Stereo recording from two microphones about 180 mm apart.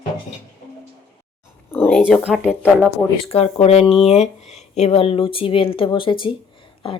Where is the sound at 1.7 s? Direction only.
10° left (ahead or behind).